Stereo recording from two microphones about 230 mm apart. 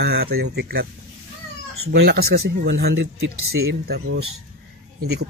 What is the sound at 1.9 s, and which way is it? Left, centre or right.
Speech, right.